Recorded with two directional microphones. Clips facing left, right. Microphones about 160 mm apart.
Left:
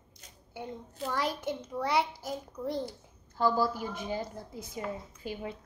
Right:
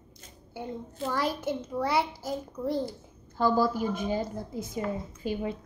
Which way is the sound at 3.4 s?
20° right (ahead or behind).